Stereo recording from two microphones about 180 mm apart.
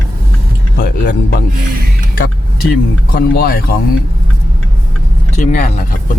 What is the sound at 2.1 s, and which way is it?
Music, 55° left (ahead or behind).